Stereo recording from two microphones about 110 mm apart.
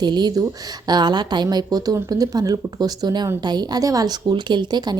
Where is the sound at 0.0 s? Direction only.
40° right (ahead or behind).